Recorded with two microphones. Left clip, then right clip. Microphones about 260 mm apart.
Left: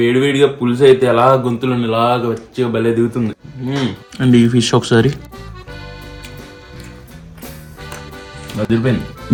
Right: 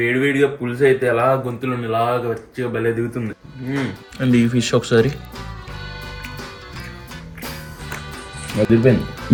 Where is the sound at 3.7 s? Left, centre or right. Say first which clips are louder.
Left 4 dB; centre.